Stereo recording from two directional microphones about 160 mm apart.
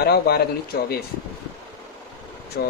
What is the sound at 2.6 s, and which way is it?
Speech, 85° left.